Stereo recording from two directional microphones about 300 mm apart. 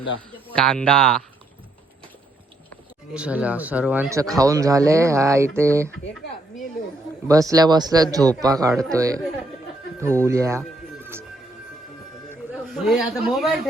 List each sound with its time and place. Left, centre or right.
0.4 s speech: centre
3.2 s speech: centre
7.3 s speech: centre
10.6 s music: centre
12.3 s a man's voice: centre